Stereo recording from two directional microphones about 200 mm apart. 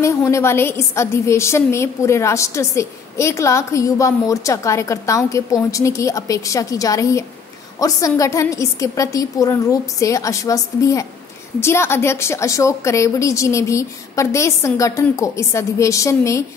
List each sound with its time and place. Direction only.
0.0 s a woman's voice: 15° left (ahead or behind)